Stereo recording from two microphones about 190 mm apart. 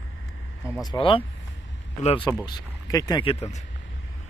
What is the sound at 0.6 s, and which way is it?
Speech, 20° left (ahead or behind).